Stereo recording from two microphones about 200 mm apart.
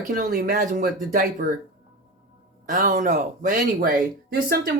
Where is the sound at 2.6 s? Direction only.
40° right (ahead or behind).